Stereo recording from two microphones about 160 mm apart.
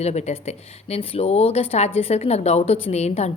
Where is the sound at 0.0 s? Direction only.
45° left (ahead or behind).